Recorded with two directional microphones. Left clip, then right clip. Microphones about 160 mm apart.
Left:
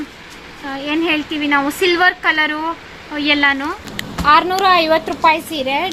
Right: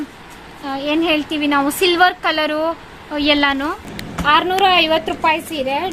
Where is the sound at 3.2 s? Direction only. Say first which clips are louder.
Left 1 dB; 90° right.